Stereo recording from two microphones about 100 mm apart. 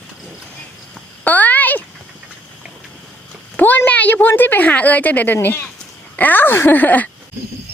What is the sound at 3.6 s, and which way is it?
A woman's voice, 20° left (ahead or behind).